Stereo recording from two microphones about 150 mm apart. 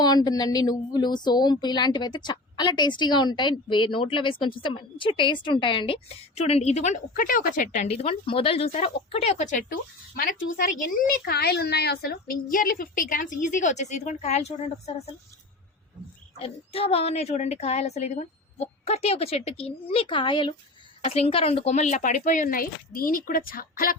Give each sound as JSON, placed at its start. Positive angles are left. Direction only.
{"t": 0.0, "sound": "a woman's voice", "side_deg": 25}
{"t": 10.2, "sound": "a woman's voice", "side_deg": 65}
{"t": 16.4, "sound": "a woman's voice", "side_deg": 40}